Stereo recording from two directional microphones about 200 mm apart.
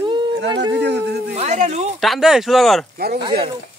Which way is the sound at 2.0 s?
Centre (ahead or behind).